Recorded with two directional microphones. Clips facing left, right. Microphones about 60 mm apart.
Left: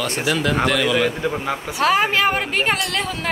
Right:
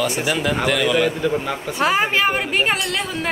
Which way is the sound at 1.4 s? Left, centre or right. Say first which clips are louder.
Even; centre.